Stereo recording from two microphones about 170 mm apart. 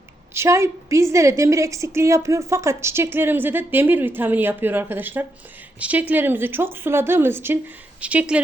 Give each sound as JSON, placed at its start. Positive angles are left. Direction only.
{"t": 0.3, "sound": "a woman's voice", "side_deg": -15}